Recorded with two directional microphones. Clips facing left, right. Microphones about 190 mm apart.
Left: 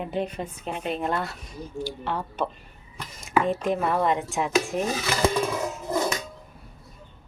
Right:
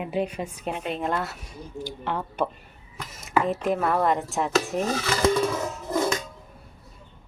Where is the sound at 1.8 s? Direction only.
15° right (ahead or behind).